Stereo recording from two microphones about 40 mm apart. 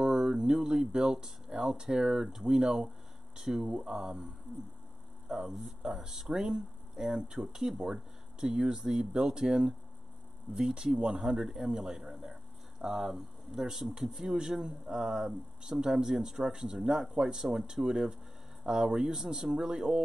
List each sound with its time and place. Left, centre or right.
0.0 s speech: centre